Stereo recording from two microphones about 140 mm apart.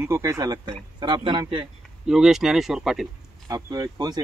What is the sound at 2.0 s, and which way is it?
Speech, 5° right (ahead or behind).